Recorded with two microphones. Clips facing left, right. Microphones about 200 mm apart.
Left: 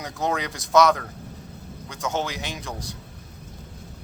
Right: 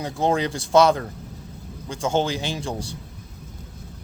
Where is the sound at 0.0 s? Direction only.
30° right (ahead or behind).